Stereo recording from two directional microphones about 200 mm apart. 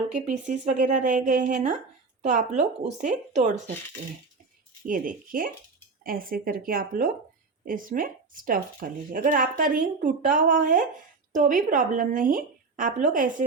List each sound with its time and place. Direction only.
0.1 s a woman's voice: 40° right (ahead or behind)
4.9 s a woman's voice: 45° right (ahead or behind)